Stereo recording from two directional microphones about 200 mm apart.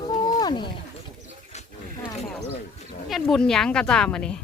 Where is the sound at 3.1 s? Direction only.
Centre (ahead or behind).